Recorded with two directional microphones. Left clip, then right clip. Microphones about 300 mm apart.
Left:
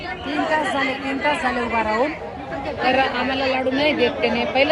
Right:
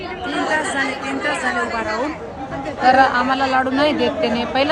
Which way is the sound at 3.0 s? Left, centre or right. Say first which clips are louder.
Right 5 dB; centre.